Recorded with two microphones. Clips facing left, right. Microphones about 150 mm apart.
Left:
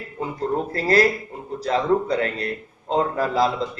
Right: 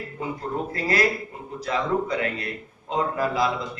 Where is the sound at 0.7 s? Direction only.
35° left (ahead or behind).